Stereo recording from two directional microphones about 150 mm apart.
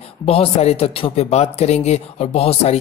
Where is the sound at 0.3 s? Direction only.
40° left (ahead or behind).